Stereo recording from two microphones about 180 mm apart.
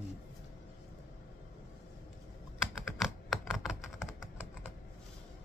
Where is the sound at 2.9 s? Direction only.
Centre (ahead or behind).